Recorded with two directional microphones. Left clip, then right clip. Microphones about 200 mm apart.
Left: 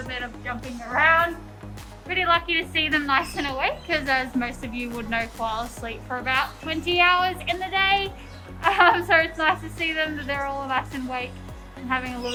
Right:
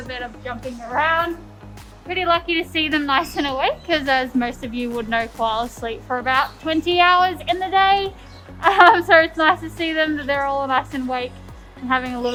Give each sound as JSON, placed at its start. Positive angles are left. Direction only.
{"t": 0.1, "sound": "a woman's voice", "side_deg": -25}
{"t": 2.0, "sound": "a woman's voice", "side_deg": -50}